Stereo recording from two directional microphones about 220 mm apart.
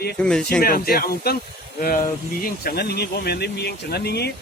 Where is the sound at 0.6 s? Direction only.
40° left (ahead or behind).